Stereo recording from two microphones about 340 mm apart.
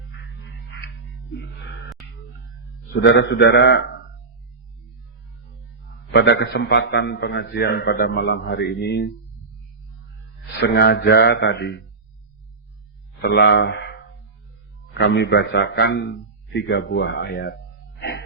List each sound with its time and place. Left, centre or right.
2.9 s a man's voice: left
6.1 s a man's voice: left
10.6 s a man's voice: left
13.2 s a man's voice: left